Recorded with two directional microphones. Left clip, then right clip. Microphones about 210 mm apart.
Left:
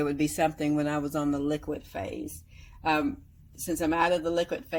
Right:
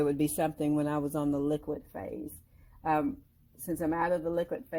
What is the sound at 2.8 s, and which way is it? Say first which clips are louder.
Speech: left 2 dB; 15° right (ahead or behind).